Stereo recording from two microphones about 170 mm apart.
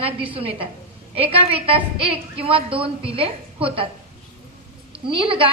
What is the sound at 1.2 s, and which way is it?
A woman's voice, 35° right (ahead or behind).